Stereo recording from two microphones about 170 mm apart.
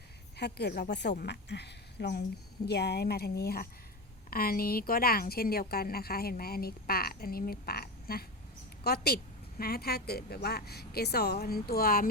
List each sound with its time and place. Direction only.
0.3 s a woman's voice: 75° left (ahead or behind)